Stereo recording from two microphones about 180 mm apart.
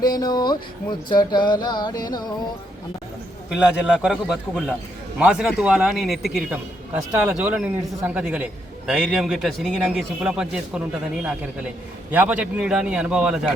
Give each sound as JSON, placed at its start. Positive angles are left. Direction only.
{"t": 0.0, "sound": "music", "side_deg": 20}
{"t": 4.0, "sound": "a man's voice", "side_deg": 0}